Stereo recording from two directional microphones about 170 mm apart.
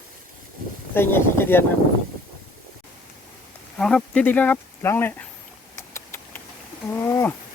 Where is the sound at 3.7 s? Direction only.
5° left (ahead or behind).